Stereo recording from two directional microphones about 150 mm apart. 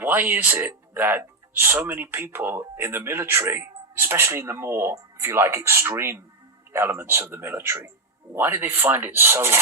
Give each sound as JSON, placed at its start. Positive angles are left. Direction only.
{"t": 0.0, "sound": "speech", "side_deg": -15}